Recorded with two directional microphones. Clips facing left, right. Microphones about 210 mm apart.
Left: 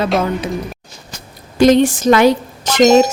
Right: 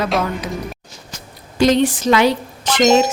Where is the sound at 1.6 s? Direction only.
50° left (ahead or behind).